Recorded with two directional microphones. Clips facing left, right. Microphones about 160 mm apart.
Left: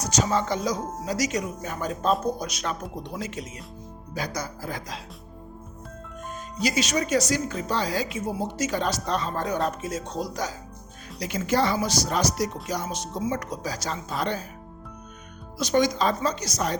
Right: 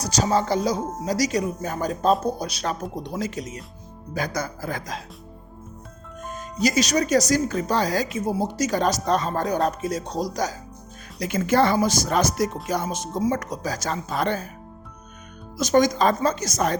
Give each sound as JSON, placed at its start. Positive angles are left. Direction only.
{"t": 0.0, "sound": "speech", "side_deg": -35}
{"t": 4.1, "sound": "speech", "side_deg": -50}
{"t": 6.3, "sound": "speech", "side_deg": -45}
{"t": 11.2, "sound": "speech", "side_deg": -50}
{"t": 15.6, "sound": "speech", "side_deg": -45}